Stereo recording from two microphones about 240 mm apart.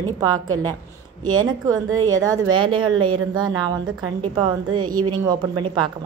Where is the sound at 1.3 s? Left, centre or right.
Centre.